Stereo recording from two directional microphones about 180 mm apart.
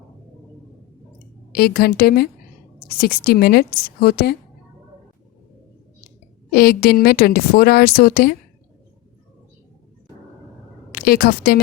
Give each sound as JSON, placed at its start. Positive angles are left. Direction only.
{"t": 1.5, "sound": "a woman's voice", "side_deg": 60}
{"t": 6.5, "sound": "a woman's voice", "side_deg": 60}
{"t": 10.9, "sound": "a woman's voice", "side_deg": 55}